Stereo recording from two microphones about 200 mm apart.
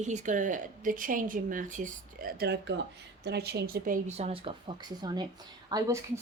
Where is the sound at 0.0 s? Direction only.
35° right (ahead or behind).